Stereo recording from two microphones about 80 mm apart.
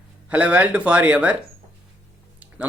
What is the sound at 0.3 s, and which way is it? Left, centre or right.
Speech, centre.